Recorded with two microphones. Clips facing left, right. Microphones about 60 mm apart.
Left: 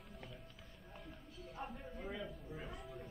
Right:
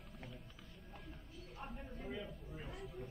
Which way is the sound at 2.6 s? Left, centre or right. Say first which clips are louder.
Even; centre.